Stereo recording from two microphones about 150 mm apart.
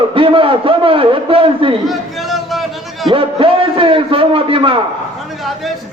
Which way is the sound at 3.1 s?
35° right (ahead or behind).